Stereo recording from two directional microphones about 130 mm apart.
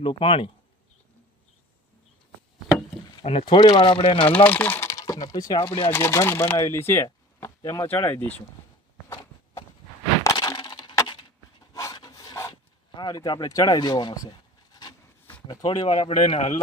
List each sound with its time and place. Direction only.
0.0 s speech: 40° left (ahead or behind)
3.2 s speech: 40° left (ahead or behind)
4.4 s speech: 15° left (ahead or behind)
9.0 s walk: 20° left (ahead or behind)
10.2 s crack: 30° left (ahead or behind)
11.7 s rub: 25° left (ahead or behind)
11.9 s a sound: 30° left (ahead or behind)
15.4 s speech: 35° left (ahead or behind)